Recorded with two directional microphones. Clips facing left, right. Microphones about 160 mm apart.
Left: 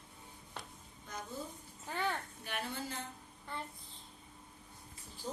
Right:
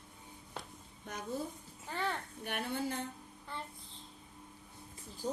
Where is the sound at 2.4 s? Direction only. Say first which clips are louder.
Right 6 dB; 55° right (ahead or behind).